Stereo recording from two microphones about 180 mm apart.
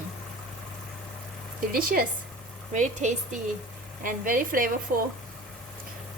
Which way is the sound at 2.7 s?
40° right (ahead or behind).